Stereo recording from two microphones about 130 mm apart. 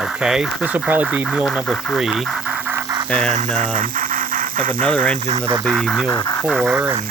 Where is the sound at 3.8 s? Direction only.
90° right.